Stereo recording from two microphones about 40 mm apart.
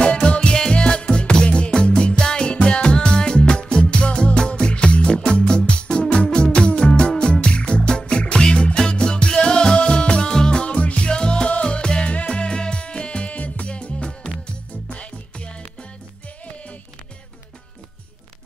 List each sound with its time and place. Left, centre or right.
0.0 s music: left
10.7 s music: left